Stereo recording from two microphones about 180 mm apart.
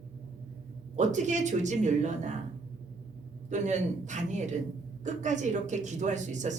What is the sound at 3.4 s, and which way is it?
A woman's voice, 40° right (ahead or behind).